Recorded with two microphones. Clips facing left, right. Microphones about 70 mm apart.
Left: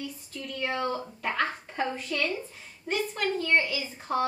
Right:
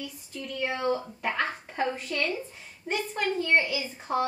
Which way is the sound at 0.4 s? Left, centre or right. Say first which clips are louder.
Even; centre.